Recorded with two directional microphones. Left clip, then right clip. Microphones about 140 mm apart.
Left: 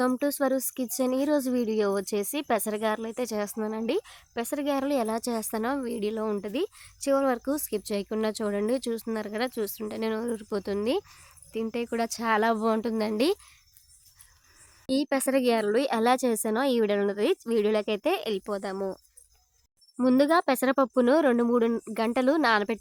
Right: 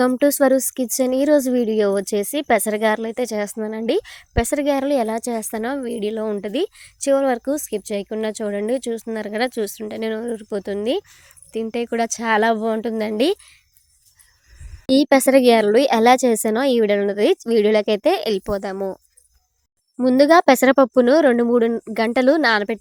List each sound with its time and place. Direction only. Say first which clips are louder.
0.2 s a woman's voice: right 11 dB; 45° right (ahead or behind)
4.1 s speech: right 11 dB; 50° right (ahead or behind); by 6.5 s 25° right (ahead or behind)
6.5 s speech: right 8 dB; 40° right (ahead or behind); by 9.1 s 20° right (ahead or behind)
9.1 s a woman's voice: right 10 dB; 35° right (ahead or behind)
12.5 s speech: right 5 dB; 20° right (ahead or behind); by 13.6 s 35° right (ahead or behind)
14.8 s a woman's voice: right 12 dB; 55° right (ahead or behind); by 18.9 s 40° right (ahead or behind)
20.0 s a woman's voice: right 8 dB; 30° right (ahead or behind)
20.3 s a woman's voice: right 11 dB; 50° right (ahead or behind); by 21.9 s 25° right (ahead or behind)
21.9 s a woman's voice: right 9 dB; 40° right (ahead or behind)